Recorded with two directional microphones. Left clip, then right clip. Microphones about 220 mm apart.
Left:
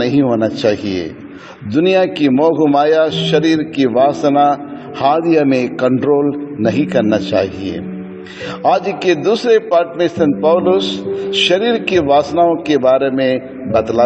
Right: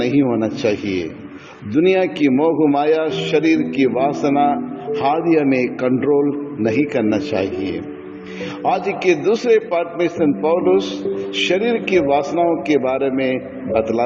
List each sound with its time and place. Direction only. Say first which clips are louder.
0.0 s a man's voice: left 4 dB; 25° left (ahead or behind)
8.6 s a man's voice: left 4 dB; 25° left (ahead or behind)